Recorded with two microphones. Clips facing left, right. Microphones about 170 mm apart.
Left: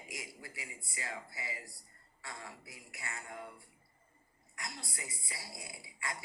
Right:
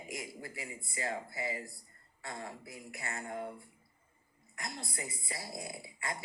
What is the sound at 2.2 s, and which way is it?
A woman's voice, 50° right (ahead or behind).